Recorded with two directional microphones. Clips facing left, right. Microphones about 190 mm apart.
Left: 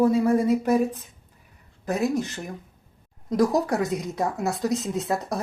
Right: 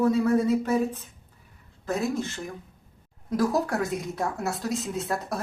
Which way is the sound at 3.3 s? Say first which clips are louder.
Left 3 dB; 20° left (ahead or behind).